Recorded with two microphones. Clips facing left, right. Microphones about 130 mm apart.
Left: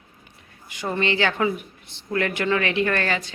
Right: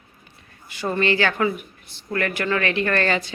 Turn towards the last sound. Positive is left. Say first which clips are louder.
# right 1 dB
turn(degrees=10)  # may be behind; listen again after turning